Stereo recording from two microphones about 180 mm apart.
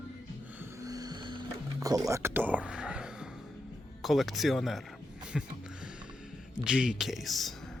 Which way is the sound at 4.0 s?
Centre (ahead or behind).